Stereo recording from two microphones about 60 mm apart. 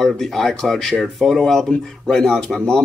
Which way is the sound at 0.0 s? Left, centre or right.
Centre.